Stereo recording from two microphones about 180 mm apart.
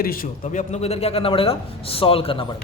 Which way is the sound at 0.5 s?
40° left (ahead or behind).